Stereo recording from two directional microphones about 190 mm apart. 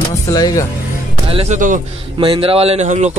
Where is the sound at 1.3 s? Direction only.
30° right (ahead or behind).